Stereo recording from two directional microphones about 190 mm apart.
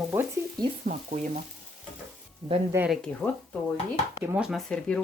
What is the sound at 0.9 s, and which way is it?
Frying, 45° right (ahead or behind).